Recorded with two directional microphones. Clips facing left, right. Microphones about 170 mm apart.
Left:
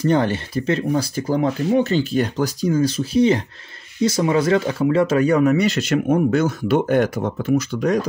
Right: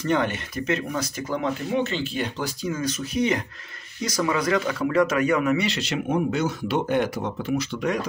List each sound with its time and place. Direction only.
0.0 s speech: 35° left (ahead or behind)